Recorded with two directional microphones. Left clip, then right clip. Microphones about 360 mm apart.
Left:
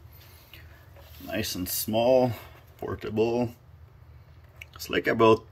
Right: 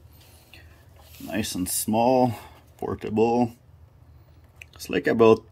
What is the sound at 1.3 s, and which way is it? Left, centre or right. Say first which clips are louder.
Speech: right 2 dB; centre.